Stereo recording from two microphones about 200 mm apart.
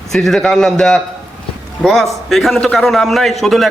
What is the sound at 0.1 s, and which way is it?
A man's voice, centre (ahead or behind).